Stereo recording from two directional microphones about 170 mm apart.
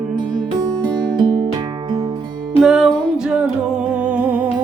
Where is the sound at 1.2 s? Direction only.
25° right (ahead or behind).